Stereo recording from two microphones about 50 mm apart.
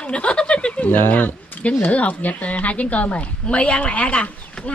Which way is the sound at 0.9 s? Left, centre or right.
Left.